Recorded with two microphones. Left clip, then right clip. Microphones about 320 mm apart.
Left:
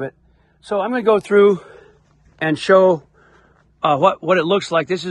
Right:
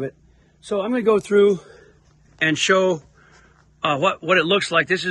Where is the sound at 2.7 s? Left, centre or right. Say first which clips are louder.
Left 6 dB; centre.